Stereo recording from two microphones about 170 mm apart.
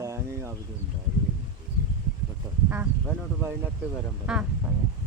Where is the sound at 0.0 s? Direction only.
15° right (ahead or behind).